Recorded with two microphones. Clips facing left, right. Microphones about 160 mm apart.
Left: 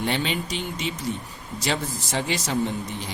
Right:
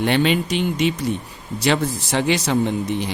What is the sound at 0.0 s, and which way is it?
Speech, 65° right (ahead or behind).